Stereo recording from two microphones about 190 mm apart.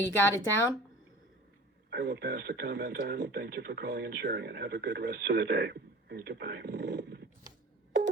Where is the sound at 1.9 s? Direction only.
60° right (ahead or behind).